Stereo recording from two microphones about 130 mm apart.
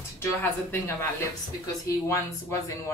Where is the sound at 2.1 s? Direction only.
20° left (ahead or behind).